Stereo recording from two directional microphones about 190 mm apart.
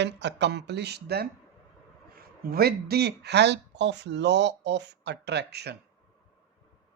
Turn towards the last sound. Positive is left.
turn(degrees=-60)  # may be behind; listen again after turning